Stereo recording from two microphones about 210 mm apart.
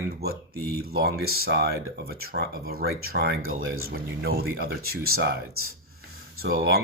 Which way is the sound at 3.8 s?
45° right (ahead or behind).